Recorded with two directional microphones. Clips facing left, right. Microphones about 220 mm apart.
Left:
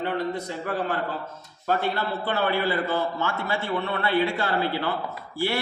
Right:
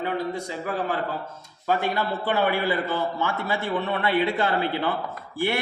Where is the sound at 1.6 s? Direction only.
15° right (ahead or behind).